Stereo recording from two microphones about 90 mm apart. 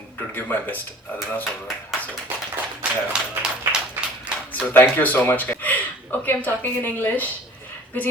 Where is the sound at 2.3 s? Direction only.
25° right (ahead or behind).